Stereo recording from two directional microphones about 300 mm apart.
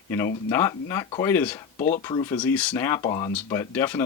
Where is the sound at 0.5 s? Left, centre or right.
Centre.